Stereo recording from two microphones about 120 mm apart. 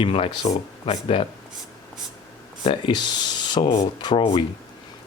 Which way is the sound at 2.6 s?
45° left (ahead or behind).